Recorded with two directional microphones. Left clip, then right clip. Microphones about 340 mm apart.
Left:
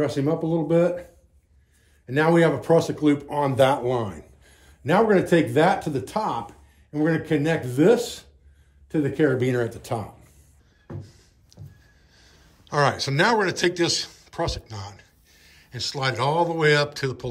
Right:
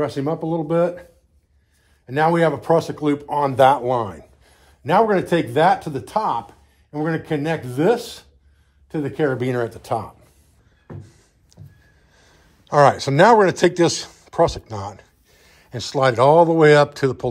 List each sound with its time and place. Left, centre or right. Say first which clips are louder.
0.0 s speech: right 1 dB; centre
2.0 s speech: right 2 dB; centre
11.0 s a sound: even; centre
12.1 s speech: right 1 dB; centre